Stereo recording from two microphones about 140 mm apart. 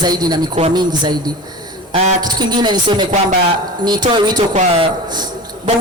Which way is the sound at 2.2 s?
30° right (ahead or behind).